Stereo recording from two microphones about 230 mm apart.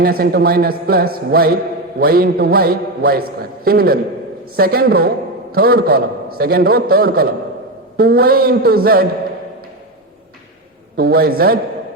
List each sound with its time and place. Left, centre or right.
0.0 s a man's voice: right
10.9 s a man's voice: right